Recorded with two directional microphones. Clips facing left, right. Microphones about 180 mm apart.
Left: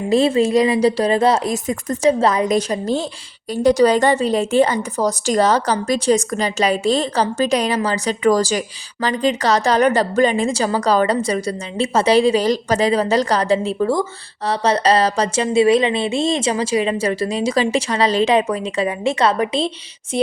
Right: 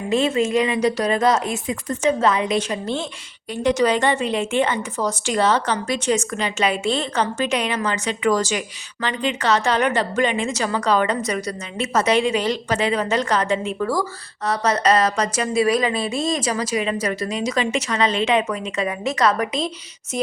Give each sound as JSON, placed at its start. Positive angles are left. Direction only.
{"t": 0.1, "sound": "a woman's voice", "side_deg": 35}